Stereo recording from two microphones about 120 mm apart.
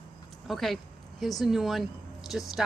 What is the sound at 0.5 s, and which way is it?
Speech, centre (ahead or behind).